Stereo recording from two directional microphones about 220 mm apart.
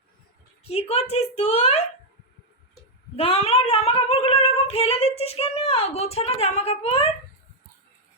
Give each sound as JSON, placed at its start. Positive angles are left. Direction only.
{"t": 0.6, "sound": "a woman's voice", "side_deg": 25}
{"t": 3.2, "sound": "female singing", "side_deg": 25}